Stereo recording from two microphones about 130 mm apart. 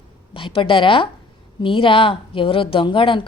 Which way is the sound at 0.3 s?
40° left (ahead or behind).